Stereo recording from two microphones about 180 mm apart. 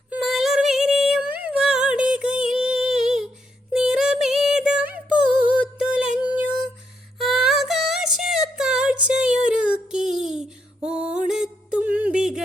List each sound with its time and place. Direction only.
0.1 s music: centre (ahead or behind)
3.7 s synthetic singing: 5° right (ahead or behind)
5.8 s music: 5° right (ahead or behind)
7.2 s music: centre (ahead or behind)
9.5 s child singing: 5° right (ahead or behind)
10.0 s a sound: 40° right (ahead or behind)
10.8 s music: 5° right (ahead or behind)